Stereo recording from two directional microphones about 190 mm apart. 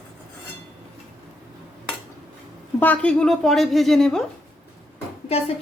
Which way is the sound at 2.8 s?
5° left (ahead or behind).